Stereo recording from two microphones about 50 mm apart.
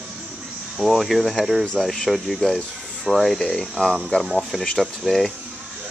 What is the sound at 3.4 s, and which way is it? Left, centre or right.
Speech, centre.